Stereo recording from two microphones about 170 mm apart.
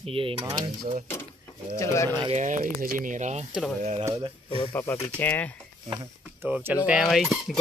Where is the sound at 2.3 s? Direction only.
45° right (ahead or behind).